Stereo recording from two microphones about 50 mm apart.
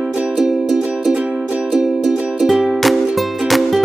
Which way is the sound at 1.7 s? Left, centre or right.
Centre.